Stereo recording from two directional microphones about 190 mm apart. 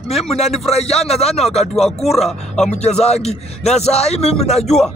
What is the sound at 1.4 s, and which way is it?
Speech, centre (ahead or behind).